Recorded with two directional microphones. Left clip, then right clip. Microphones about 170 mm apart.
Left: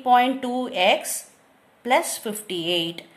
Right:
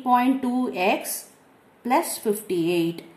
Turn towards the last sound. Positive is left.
turn(degrees=45)  # may be behind; listen again after turning